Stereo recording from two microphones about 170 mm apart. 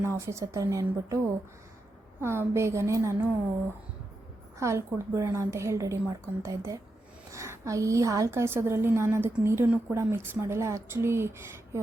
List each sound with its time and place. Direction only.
0.0 s a woman's voice: 15° right (ahead or behind)
2.2 s a woman's voice: 15° right (ahead or behind)
4.6 s a woman's voice: 15° right (ahead or behind)